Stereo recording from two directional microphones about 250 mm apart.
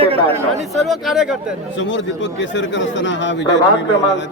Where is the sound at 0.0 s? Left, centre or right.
Right.